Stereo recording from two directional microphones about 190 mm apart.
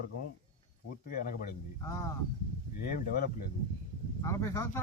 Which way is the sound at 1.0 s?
50° left (ahead or behind).